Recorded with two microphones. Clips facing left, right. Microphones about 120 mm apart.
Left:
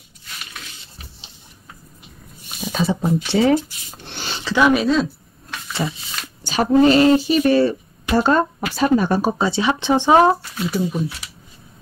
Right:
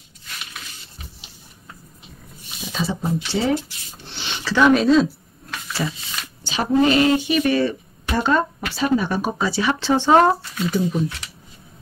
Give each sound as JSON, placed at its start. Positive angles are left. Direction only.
{"t": 2.6, "sound": "speech", "side_deg": 55}
{"t": 4.1, "sound": "rub", "side_deg": 45}
{"t": 4.6, "sound": "a sound", "side_deg": 5}
{"t": 6.4, "sound": "speech", "side_deg": 45}
{"t": 9.4, "sound": "speech", "side_deg": 25}